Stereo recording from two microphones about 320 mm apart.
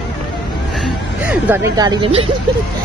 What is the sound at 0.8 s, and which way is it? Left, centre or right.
Speech, centre.